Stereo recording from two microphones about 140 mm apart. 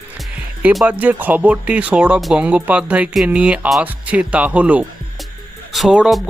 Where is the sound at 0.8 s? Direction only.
10° right (ahead or behind).